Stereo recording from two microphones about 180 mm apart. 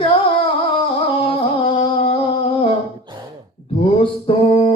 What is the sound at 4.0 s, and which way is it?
Mantra, 30° left (ahead or behind).